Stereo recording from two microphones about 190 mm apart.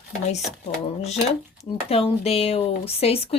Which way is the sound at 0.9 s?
35° left (ahead or behind).